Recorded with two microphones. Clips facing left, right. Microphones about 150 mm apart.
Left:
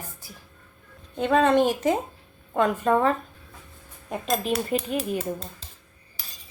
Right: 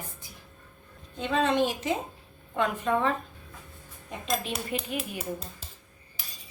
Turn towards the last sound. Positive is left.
turn(degrees=40)  # may be behind; listen again after turning